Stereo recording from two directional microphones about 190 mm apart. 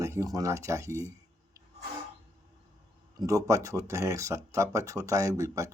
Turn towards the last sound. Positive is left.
turn(degrees=-15)  # may be behind; listen again after turning